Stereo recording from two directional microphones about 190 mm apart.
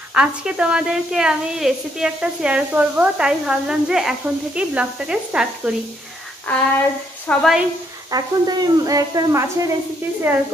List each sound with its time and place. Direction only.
0.1 s a woman's voice: 5° right (ahead or behind)
6.5 s child singing: 10° left (ahead or behind)
7.2 s a woman's voice: centre (ahead or behind)
8.1 s speech: 20° right (ahead or behind)